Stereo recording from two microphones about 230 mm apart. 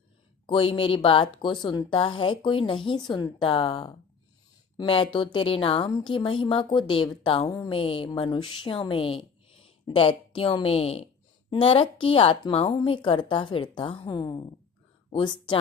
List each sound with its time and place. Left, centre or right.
0.4 s a woman's voice: left